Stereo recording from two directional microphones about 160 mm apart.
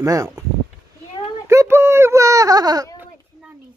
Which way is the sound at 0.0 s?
20° right (ahead or behind).